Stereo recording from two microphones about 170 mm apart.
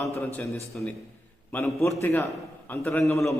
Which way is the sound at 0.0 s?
15° left (ahead or behind).